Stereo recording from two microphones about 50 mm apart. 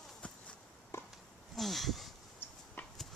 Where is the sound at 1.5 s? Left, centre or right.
Centre.